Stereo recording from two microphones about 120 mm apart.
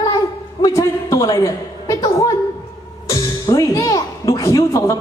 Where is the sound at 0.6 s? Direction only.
25° left (ahead or behind).